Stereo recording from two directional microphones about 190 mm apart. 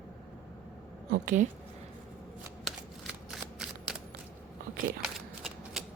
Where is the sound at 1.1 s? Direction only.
45° right (ahead or behind).